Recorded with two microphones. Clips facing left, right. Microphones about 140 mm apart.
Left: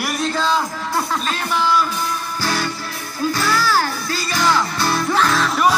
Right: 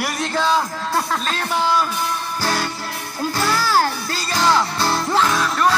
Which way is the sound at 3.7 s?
35° right (ahead or behind).